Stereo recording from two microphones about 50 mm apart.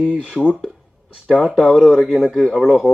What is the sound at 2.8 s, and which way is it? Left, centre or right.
Speech, right.